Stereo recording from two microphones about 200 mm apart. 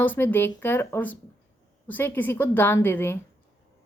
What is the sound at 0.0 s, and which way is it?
A woman's voice, 10° left (ahead or behind).